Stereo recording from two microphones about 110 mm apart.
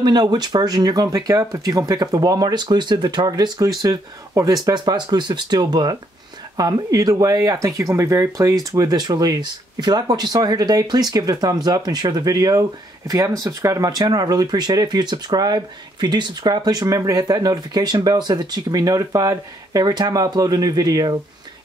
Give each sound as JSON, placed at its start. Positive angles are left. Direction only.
{"t": 0.0, "sound": "speech", "side_deg": -40}